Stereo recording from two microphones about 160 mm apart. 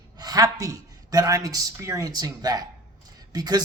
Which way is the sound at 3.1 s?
25° right (ahead or behind).